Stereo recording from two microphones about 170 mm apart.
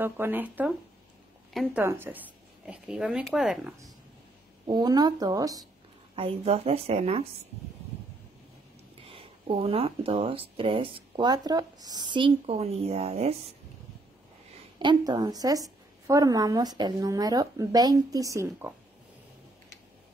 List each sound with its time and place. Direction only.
0.0 s speech: 10° right (ahead or behind)
1.5 s speech: centre (ahead or behind)
1.8 s speech: 10° right (ahead or behind)
4.6 s a woman's voice: 25° right (ahead or behind)
6.1 s speech: 35° right (ahead or behind)
9.0 s speech: 35° right (ahead or behind)
14.8 s a woman's voice: 25° right (ahead or behind)